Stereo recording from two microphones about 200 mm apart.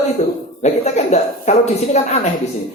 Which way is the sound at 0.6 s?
35° left (ahead or behind).